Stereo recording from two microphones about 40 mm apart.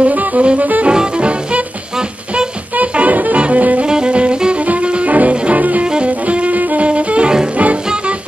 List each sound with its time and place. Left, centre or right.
0.0 s music: right
0.8 s music: right
3.8 s music: right